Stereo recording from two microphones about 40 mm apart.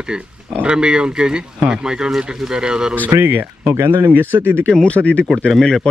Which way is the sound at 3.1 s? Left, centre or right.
Right.